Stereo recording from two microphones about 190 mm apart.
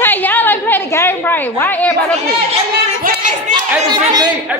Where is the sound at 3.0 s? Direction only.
40° right (ahead or behind).